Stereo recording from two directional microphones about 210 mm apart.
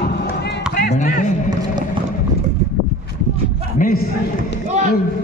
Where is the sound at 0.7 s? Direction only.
40° left (ahead or behind).